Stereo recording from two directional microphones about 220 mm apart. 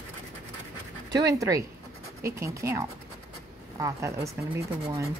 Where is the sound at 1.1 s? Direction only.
15° right (ahead or behind).